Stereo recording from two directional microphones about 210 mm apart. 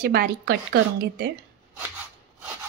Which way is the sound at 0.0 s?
45° right (ahead or behind).